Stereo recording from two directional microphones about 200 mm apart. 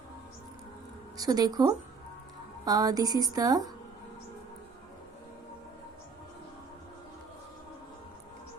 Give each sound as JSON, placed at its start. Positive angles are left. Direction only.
{"t": 1.1, "sound": "speech", "side_deg": -20}